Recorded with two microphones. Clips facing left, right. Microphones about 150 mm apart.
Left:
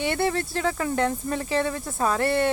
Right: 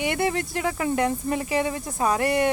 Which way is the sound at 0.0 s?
15° right (ahead or behind).